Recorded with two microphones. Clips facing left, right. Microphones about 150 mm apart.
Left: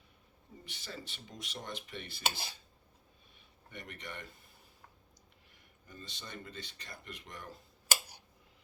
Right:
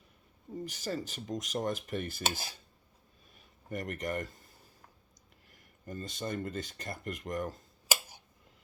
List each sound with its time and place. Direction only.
0.6 s dishes: 45° right (ahead or behind)
3.7 s speech: 45° right (ahead or behind)
5.5 s speech: 45° right (ahead or behind)
7.3 s dishes: 45° right (ahead or behind)